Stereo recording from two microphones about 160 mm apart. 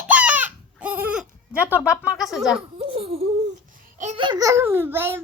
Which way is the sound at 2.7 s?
35° right (ahead or behind).